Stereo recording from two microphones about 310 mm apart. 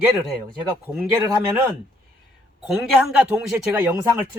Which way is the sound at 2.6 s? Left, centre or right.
Centre.